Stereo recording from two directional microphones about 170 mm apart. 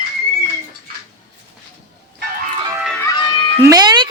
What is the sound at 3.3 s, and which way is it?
Cat, 35° left (ahead or behind).